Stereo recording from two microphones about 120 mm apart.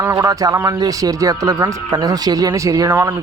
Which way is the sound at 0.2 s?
30° right (ahead or behind).